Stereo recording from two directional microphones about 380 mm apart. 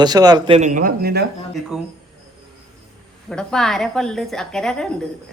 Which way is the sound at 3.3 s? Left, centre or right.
Centre.